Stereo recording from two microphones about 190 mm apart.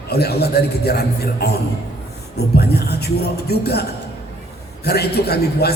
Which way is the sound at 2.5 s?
55° left (ahead or behind).